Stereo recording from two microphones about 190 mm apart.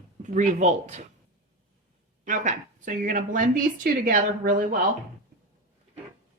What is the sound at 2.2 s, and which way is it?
Speech, 40° right (ahead or behind).